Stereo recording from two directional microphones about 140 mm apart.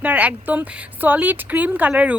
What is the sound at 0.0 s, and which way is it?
Speech, 10° right (ahead or behind).